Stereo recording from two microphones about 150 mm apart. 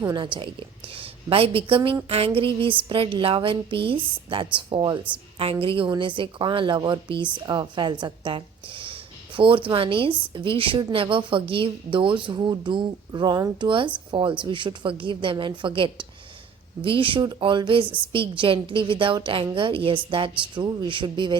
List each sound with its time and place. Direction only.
0.0 s a woman's voice: 30° right (ahead or behind)